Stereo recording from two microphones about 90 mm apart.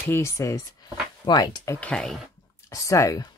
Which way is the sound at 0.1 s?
30° left (ahead or behind).